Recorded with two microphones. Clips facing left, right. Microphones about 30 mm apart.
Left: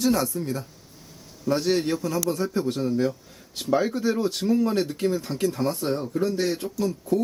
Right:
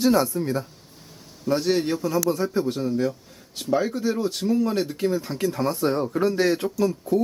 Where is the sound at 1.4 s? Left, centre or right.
Centre.